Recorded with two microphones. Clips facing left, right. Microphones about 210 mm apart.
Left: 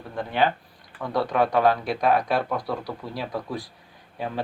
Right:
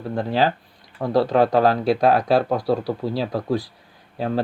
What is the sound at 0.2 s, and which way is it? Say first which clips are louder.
Speech: right 3 dB; 35° right (ahead or behind).